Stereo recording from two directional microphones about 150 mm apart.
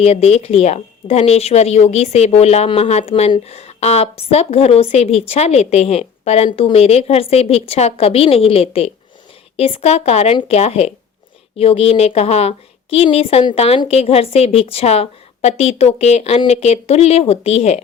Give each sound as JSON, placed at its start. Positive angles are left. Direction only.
{"t": 0.0, "sound": "a woman's voice", "side_deg": 45}